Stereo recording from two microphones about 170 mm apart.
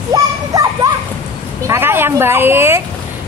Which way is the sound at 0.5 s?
20° right (ahead or behind).